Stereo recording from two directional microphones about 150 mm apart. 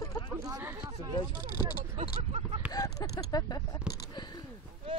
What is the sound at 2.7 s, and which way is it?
Speech, 25° left (ahead or behind).